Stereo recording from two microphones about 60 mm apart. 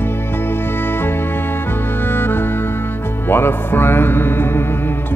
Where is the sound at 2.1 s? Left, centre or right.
Left.